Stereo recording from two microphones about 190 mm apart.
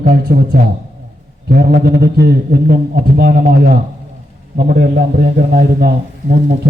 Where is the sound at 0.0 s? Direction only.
55° right (ahead or behind).